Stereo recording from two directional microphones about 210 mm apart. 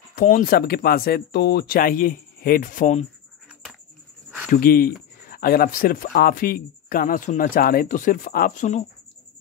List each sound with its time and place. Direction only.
0.1 s speech: 40° left (ahead or behind)
4.5 s speech: 45° left (ahead or behind)